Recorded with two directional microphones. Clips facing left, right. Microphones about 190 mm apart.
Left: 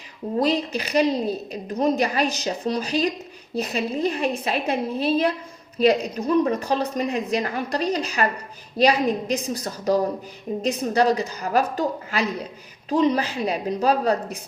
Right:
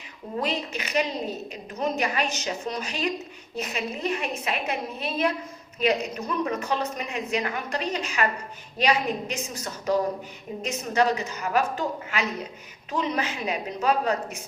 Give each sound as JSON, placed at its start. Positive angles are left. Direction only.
{"t": 0.3, "sound": "a woman's voice", "side_deg": 35}